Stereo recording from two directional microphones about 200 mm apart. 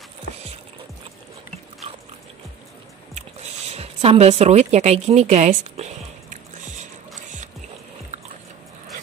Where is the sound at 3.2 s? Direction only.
30° right (ahead or behind).